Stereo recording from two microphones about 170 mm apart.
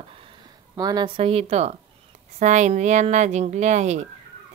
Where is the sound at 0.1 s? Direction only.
30° right (ahead or behind).